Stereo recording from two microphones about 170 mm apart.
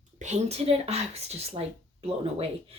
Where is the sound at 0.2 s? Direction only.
40° right (ahead or behind).